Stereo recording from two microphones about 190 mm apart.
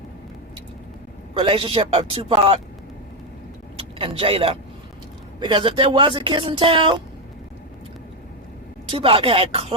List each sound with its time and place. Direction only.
1.3 s speech: 30° right (ahead or behind)
3.8 s speech: 30° right (ahead or behind)
8.9 s speech: 30° right (ahead or behind)